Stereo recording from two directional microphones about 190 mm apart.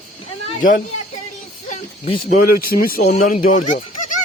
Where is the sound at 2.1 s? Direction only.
40° left (ahead or behind); by 3.4 s 60° left (ahead or behind).